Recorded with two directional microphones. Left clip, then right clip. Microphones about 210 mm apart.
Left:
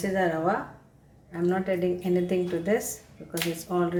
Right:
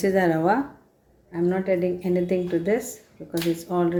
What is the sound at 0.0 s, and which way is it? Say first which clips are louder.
Speech: right 5 dB; 45° right (ahead or behind).